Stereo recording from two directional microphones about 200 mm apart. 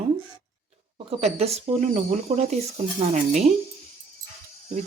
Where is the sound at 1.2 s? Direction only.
30° right (ahead or behind).